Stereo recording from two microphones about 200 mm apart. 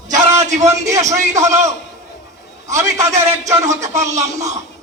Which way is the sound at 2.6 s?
15° right (ahead or behind).